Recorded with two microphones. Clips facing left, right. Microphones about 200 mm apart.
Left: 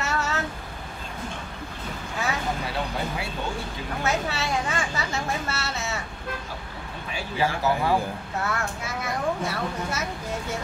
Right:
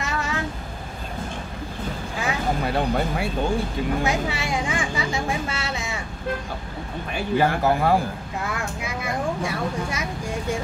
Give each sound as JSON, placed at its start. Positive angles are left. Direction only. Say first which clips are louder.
{"t": 0.0, "sound": "a sound", "louder": "even", "side_deg": -15}
{"t": 2.6, "sound": "speech", "louder": "right 6 dB", "side_deg": -55}
{"t": 4.0, "sound": "speech", "louder": "right 2 dB", "side_deg": -15}
{"t": 7.2, "sound": "speech", "louder": "right 5 dB", "side_deg": -55}
{"t": 8.5, "sound": "speech", "louder": "right 2 dB", "side_deg": -15}